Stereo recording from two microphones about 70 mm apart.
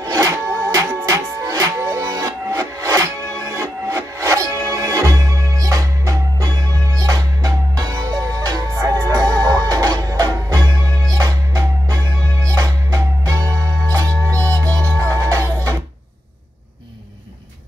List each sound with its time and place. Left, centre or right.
0.0 s music: right